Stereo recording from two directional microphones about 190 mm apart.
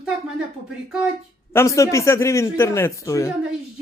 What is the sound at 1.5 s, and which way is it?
A woman's voice, 15° left (ahead or behind).